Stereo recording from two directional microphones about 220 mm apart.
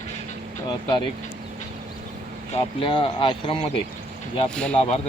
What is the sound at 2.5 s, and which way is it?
Speech, 20° left (ahead or behind).